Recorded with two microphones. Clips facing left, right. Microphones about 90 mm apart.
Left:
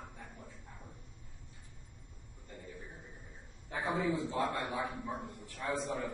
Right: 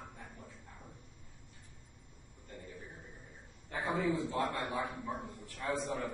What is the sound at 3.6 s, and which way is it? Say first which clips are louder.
A man's voice: even; 15° left (ahead or behind).